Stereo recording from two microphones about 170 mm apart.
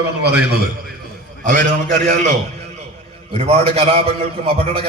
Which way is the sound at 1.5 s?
50° right (ahead or behind).